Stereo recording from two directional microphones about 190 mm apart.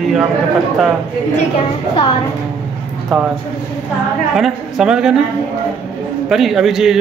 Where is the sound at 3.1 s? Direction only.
Centre (ahead or behind).